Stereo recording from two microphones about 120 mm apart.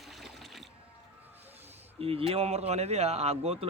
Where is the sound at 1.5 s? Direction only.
60° right (ahead or behind).